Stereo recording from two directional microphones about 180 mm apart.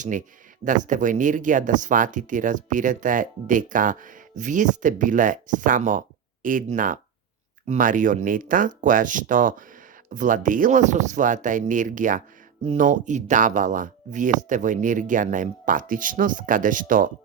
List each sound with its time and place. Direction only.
0.0 s speech: 45° right (ahead or behind)